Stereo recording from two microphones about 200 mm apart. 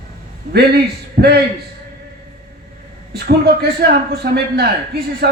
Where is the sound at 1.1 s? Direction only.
55° right (ahead or behind).